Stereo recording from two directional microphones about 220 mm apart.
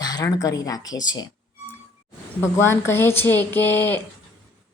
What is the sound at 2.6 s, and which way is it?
Speech, 10° left (ahead or behind).